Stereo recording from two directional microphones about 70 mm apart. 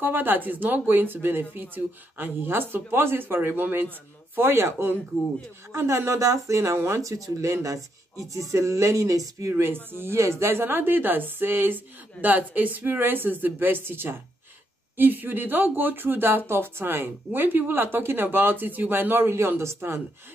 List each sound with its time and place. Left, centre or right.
0.0 s a woman's voice: right
4.4 s speech: right
9.5 s a woman's voice: right